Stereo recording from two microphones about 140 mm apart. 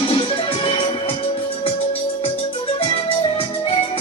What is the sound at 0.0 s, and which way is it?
Music, 40° left (ahead or behind).